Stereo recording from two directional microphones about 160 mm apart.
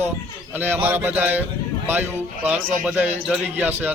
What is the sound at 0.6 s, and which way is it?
A man's voice, 10° right (ahead or behind).